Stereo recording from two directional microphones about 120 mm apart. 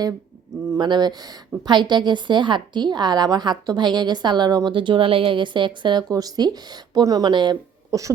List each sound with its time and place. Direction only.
0.8 s a woman's voice: 35° right (ahead or behind)